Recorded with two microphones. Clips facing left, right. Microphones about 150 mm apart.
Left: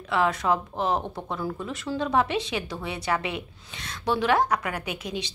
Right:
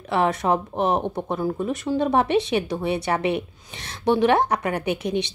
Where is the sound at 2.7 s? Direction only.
25° right (ahead or behind).